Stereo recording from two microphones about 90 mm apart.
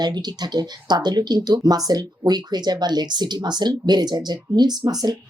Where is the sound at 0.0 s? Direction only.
50° right (ahead or behind).